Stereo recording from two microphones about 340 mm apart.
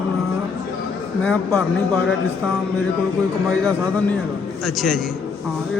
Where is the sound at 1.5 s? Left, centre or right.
Centre.